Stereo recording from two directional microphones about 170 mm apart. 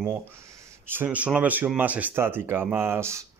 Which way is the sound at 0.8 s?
10° right (ahead or behind).